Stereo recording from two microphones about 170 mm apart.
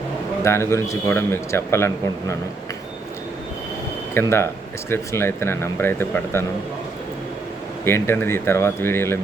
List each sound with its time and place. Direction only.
0.4 s a man's voice: 15° left (ahead or behind)
4.1 s a man's voice: 15° left (ahead or behind)
7.9 s a man's voice: 15° left (ahead or behind)